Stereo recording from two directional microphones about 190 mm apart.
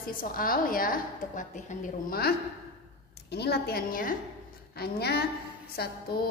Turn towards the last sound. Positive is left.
turn(degrees=55)  # may be behind; listen again after turning